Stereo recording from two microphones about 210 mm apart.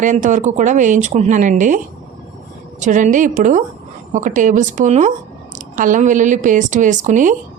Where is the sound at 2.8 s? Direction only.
35° right (ahead or behind).